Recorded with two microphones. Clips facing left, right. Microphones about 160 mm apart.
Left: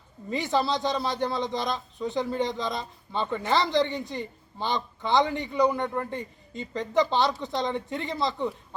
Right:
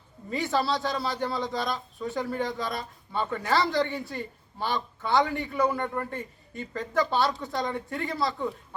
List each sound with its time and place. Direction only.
0.3 s a man's voice: 20° left (ahead or behind)